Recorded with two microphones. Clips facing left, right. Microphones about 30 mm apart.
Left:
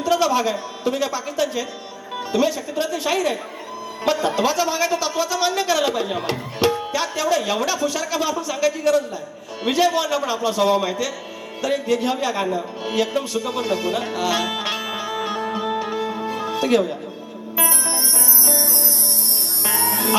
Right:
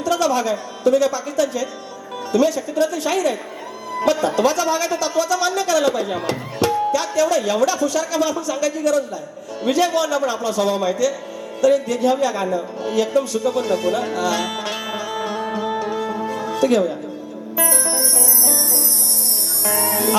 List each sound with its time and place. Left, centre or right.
0.0 s speech: centre
14.5 s music: left